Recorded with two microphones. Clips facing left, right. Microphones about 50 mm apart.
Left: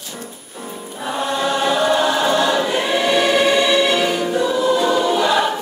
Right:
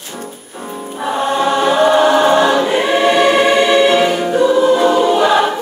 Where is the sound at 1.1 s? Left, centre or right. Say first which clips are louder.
Right 5 dB; right.